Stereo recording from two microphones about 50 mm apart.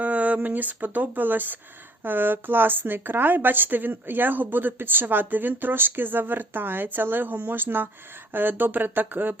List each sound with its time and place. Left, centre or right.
0.0 s a woman's voice: right